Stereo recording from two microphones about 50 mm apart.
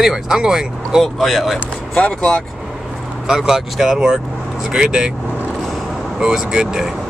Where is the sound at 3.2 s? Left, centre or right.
Centre.